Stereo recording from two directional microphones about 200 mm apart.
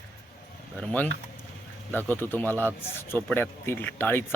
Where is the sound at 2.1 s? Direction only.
10° left (ahead or behind).